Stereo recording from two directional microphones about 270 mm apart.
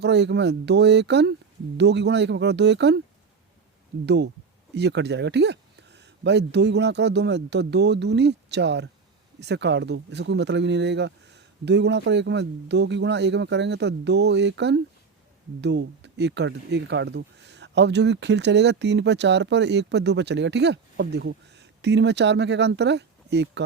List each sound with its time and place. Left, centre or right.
0.0 s speech: right
4.0 s speech: right